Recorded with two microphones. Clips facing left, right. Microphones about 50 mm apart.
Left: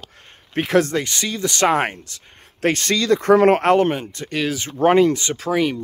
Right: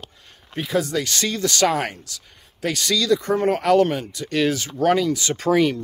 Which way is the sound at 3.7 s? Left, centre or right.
Left.